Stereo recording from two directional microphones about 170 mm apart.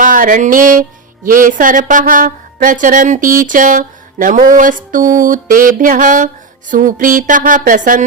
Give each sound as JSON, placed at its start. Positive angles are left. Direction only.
{"t": 0.0, "sound": "music", "side_deg": -50}